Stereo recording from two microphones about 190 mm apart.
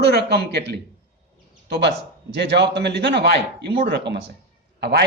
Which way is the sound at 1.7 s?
60° right (ahead or behind).